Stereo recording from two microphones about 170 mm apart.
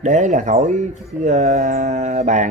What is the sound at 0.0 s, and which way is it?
A man's voice, 45° right (ahead or behind).